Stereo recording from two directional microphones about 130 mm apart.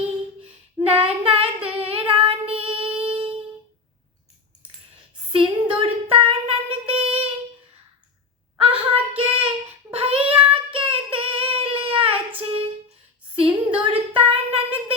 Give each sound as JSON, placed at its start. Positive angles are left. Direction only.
{"t": 0.4, "sound": "child singing", "side_deg": -50}
{"t": 5.3, "sound": "a sound", "side_deg": -40}
{"t": 9.1, "sound": "child singing", "side_deg": -45}
{"t": 10.2, "sound": "child singing", "side_deg": -10}
{"t": 10.5, "sound": "child singing", "side_deg": -45}
{"t": 13.3, "sound": "a sound", "side_deg": -45}